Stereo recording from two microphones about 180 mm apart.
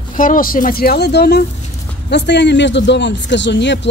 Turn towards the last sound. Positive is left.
turn(degrees=75)  # may be behind; listen again after turning